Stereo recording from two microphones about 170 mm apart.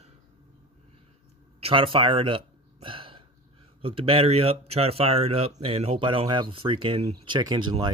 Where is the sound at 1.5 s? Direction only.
35° right (ahead or behind).